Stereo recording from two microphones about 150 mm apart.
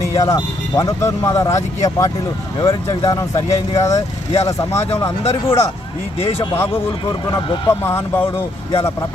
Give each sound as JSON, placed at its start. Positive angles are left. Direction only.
{"t": 0.0, "sound": "speech", "side_deg": 20}
{"t": 6.1, "sound": "speech", "side_deg": 40}
{"t": 6.4, "sound": "speech", "side_deg": 20}
{"t": 7.7, "sound": "speech", "side_deg": 15}